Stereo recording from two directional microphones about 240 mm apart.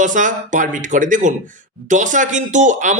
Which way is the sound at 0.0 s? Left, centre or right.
Right.